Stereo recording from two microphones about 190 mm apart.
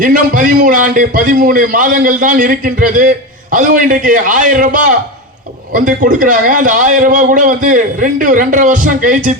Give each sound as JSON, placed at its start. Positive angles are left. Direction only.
{"t": 0.0, "sound": "a man's voice", "side_deg": -45}